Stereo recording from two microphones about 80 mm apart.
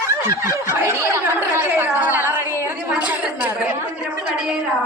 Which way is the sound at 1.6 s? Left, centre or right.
Right.